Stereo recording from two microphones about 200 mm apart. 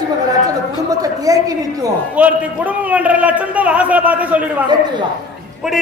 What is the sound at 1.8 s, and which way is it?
A man's voice, 5° right (ahead or behind).